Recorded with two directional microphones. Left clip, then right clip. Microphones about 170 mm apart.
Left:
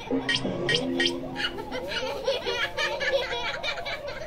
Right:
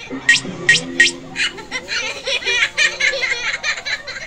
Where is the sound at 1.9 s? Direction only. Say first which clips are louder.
Right 7 dB; 5° right (ahead or behind).